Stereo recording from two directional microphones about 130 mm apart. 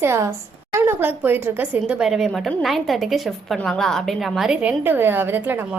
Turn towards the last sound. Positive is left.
turn(degrees=-15)  # may be behind; listen again after turning